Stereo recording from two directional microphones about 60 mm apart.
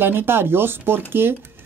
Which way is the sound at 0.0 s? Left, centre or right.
Right.